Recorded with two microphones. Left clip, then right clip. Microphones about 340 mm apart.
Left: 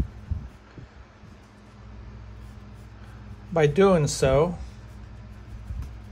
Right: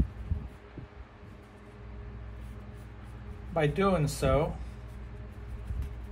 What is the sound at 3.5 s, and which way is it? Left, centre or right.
Speech, left.